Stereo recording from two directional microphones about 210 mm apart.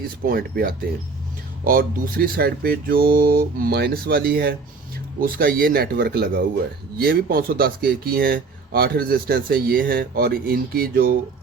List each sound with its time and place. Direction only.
0.3 s speech: 45° right (ahead or behind)